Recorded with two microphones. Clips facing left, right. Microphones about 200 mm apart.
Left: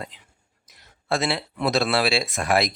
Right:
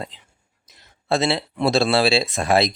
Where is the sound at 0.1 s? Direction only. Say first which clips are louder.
Right 1 dB; 30° right (ahead or behind).